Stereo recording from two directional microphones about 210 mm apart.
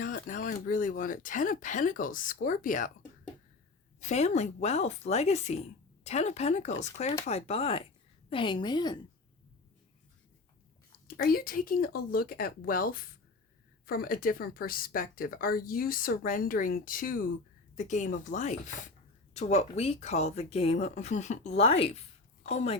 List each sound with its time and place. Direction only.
0.0 s speech: 40° left (ahead or behind)
4.0 s a woman's voice: 30° left (ahead or behind)
11.2 s a woman's voice: 45° left (ahead or behind)